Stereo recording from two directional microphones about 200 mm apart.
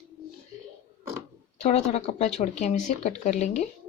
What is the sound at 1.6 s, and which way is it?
Speech, 35° left (ahead or behind).